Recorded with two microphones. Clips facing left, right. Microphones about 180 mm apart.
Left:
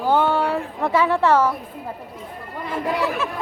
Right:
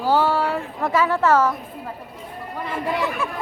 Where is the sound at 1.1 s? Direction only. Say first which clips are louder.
Even; 10° left (ahead or behind).